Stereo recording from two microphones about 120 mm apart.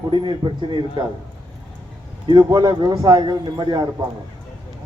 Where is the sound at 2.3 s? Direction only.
40° right (ahead or behind).